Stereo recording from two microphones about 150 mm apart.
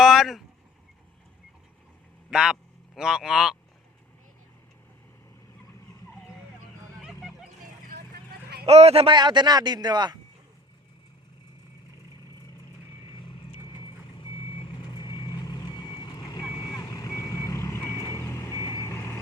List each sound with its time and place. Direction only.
0.0 s a sound: centre (ahead or behind)
2.3 s speech: 5° right (ahead or behind)
7.0 s a sound: centre (ahead or behind)
7.9 s vehicle: 85° right
8.6 s speech: 45° right (ahead or behind)
13.8 s vehicle: 35° left (ahead or behind); by 19.2 s 15° left (ahead or behind)